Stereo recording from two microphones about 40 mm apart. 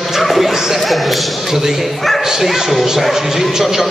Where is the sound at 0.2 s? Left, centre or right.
Centre.